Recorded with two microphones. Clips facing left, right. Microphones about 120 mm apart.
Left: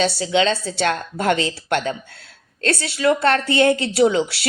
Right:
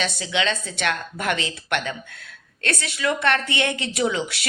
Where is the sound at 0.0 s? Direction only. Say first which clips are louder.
Left 6 dB; 30° left (ahead or behind).